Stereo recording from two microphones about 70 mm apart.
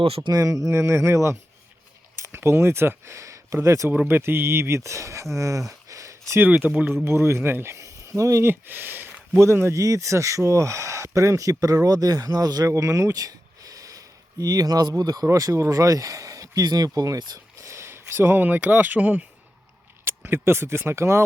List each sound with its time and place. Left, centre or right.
0.2 s speech: right
0.4 s speech: right
4.1 s speech: right
6.4 s speech: right
7.0 s speech: right
8.4 s speech: right
9.4 s speech: right
12.6 s speech: right
17.6 s a sound: right
18.3 s speech: right
20.1 s speech: right